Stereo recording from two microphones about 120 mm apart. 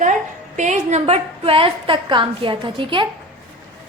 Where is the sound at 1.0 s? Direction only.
55° right (ahead or behind).